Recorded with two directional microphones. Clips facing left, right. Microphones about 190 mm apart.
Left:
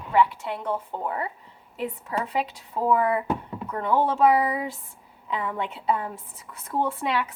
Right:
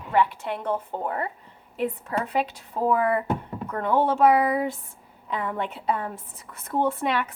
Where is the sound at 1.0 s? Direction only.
45° right (ahead or behind).